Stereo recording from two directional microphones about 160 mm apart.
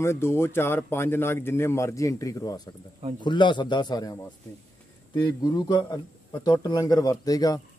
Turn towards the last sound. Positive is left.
turn(degrees=25)  # may be behind; listen again after turning